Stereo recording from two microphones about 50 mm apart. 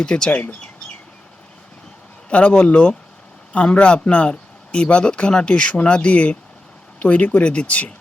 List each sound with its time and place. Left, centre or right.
0.0 s speech: centre
0.3 s speech: left
2.3 s speech: left